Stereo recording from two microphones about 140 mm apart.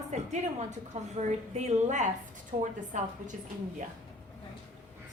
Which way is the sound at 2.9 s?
65° right (ahead or behind).